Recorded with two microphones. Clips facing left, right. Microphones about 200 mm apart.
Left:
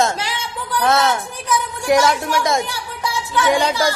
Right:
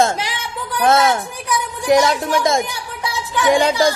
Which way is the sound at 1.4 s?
20° right (ahead or behind).